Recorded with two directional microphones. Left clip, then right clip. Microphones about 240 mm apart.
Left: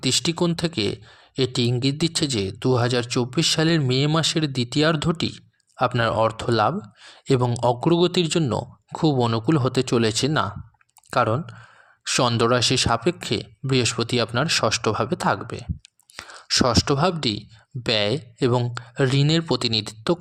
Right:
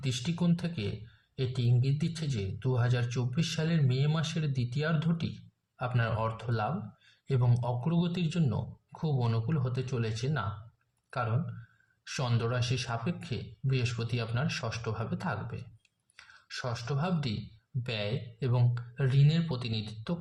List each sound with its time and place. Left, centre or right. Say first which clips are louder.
0.0 s speech: left 14 dB; left
12.0 s speech: left 15 dB; left